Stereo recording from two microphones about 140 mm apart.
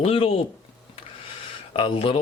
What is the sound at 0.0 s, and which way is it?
Speech, 40° left (ahead or behind).